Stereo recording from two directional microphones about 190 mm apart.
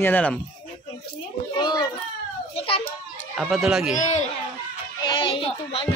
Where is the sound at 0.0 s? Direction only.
10° left (ahead or behind).